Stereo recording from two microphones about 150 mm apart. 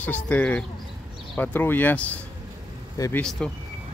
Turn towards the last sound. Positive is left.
turn(degrees=5)  # may be behind; listen again after turning